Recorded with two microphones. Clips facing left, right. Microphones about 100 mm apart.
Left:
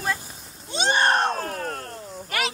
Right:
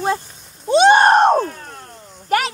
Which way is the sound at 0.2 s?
5° left (ahead or behind).